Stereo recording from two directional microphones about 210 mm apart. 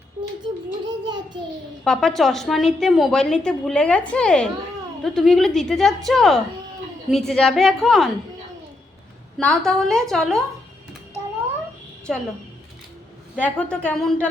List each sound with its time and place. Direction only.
1.0 s a child's voice: 20° right (ahead or behind)
1.8 s a woman's voice: 5° left (ahead or behind)
9.4 s a woman's voice: 5° left (ahead or behind)
12.1 s a woman's voice: centre (ahead or behind)
13.3 s a woman's voice: 5° left (ahead or behind)